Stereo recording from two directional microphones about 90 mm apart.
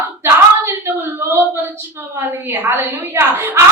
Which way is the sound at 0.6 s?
25° right (ahead or behind).